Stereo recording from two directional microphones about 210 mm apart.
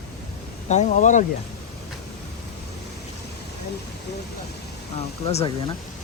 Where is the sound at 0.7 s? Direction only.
35° left (ahead or behind).